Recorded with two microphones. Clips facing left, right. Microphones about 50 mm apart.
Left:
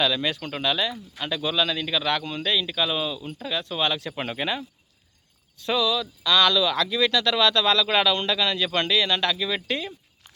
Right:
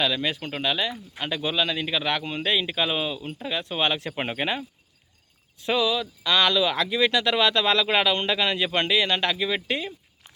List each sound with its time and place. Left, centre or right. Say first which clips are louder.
0.0 s speech: left 1 dB; centre